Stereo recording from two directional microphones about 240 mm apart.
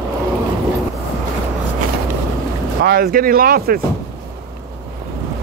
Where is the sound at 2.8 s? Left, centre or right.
Right.